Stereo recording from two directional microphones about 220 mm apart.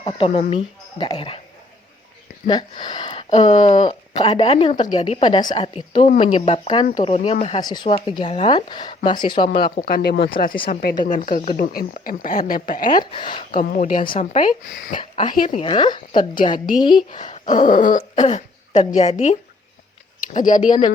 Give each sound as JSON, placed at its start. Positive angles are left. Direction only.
{"t": 0.0, "sound": "a woman's voice", "side_deg": 30}
{"t": 2.5, "sound": "a woman's voice", "side_deg": 20}
{"t": 9.8, "sound": "speech", "side_deg": 45}
{"t": 12.9, "sound": "a woman's voice", "side_deg": 20}
{"t": 13.6, "sound": "speech", "side_deg": 35}
{"t": 14.9, "sound": "a woman's voice", "side_deg": 20}
{"t": 17.2, "sound": "speech", "side_deg": 35}